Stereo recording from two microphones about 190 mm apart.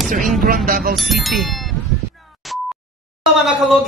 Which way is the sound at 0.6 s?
50° right (ahead or behind).